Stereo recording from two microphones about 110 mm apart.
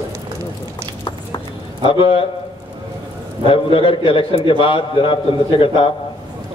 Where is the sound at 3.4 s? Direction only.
55° left (ahead or behind).